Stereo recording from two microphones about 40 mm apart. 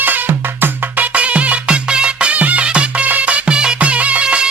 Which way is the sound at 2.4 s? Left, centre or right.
Right.